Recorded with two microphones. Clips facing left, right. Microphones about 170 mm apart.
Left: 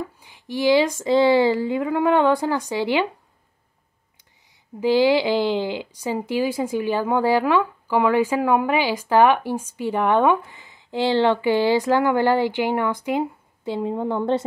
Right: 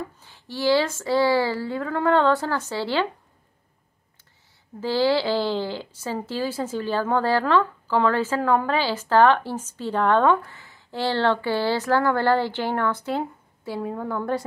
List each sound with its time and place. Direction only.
0.2 s speech: 15° left (ahead or behind)
4.7 s speech: 15° left (ahead or behind)